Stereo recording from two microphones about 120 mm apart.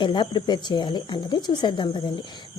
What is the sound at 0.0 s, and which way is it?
Speech, 40° left (ahead or behind).